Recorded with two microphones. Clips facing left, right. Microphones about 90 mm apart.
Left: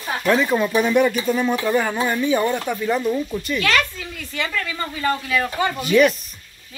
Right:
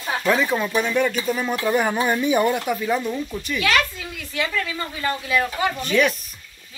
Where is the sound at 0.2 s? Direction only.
Centre (ahead or behind).